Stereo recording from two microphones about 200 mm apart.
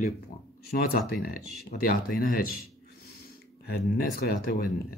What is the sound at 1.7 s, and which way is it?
Speech, 45° left (ahead or behind).